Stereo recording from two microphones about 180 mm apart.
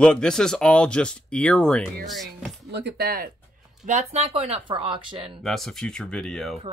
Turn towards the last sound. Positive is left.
turn(degrees=5)  # may be behind; listen again after turning